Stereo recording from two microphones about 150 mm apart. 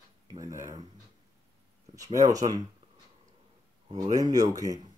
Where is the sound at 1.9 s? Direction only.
20° right (ahead or behind).